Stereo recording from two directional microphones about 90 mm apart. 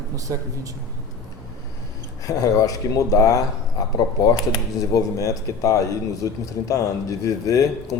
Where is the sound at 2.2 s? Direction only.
40° left (ahead or behind).